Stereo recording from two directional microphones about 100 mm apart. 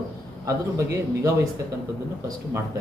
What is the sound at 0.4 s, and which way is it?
Speech, 30° right (ahead or behind).